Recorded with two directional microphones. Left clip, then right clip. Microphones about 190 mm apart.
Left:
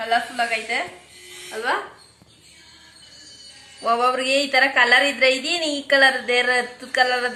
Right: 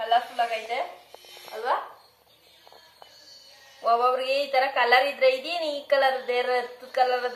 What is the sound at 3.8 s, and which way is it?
A woman's voice, 10° left (ahead or behind).